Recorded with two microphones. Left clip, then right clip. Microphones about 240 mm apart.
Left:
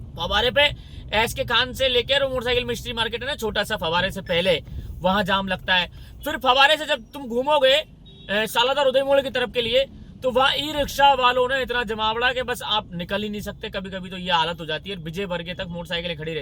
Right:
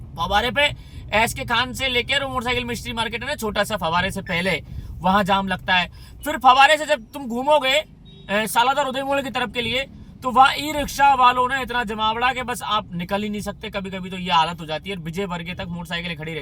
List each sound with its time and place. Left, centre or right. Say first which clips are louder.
0.2 s speech: even; centre